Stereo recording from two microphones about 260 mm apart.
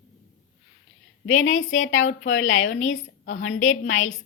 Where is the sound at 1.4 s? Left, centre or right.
Left.